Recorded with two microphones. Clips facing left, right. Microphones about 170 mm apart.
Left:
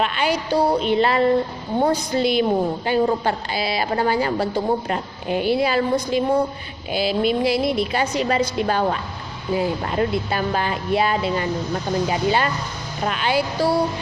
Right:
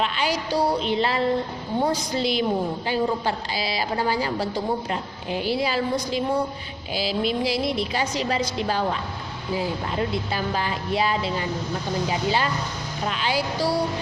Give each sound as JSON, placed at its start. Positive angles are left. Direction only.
{"t": 0.0, "sound": "a woman's voice", "side_deg": 55}